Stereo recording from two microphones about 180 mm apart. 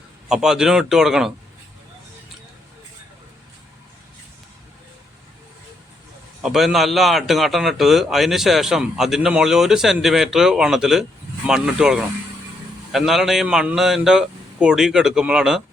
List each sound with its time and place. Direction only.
0.3 s a man's voice: 5° right (ahead or behind)
6.4 s a man's voice: centre (ahead or behind)